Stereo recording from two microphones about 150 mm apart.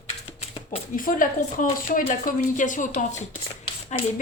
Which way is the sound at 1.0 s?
65° left (ahead or behind).